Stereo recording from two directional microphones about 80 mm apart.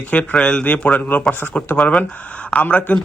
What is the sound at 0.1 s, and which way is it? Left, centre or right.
A man's voice, centre.